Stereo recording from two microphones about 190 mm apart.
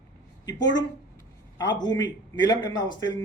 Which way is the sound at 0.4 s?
20° left (ahead or behind).